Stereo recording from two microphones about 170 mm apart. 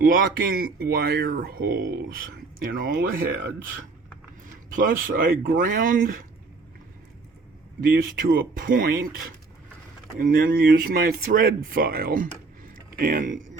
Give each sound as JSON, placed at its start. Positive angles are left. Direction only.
{"t": 0.0, "sound": "speech", "side_deg": -55}
{"t": 4.7, "sound": "speech", "side_deg": -55}
{"t": 7.8, "sound": "speech", "side_deg": -55}